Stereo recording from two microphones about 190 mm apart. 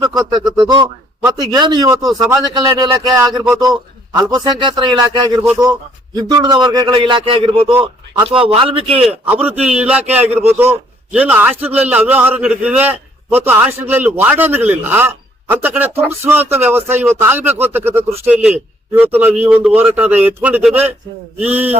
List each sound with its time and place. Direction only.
0.2 s a man's voice: 20° right (ahead or behind)
9.2 s a man's voice: 10° right (ahead or behind)